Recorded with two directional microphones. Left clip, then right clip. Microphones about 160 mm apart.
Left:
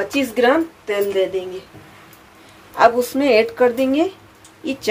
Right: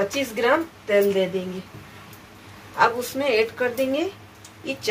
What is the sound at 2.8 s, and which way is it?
Speech, 90° left.